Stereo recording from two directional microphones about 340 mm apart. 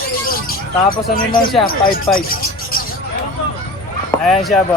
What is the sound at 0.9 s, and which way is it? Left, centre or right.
Speech, left.